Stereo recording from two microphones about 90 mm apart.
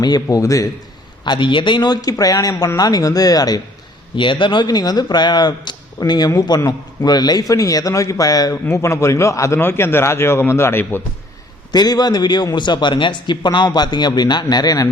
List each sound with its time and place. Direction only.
0.0 s a man's voice: 45° left (ahead or behind)
1.2 s a man's voice: 60° left (ahead or behind)
4.1 s a man's voice: 65° left (ahead or behind); by 8.5 s 45° left (ahead or behind)
8.7 s a man's voice: 30° left (ahead or behind)
9.6 s a man's voice: 25° left (ahead or behind)
11.7 s a man's voice: 50° left (ahead or behind)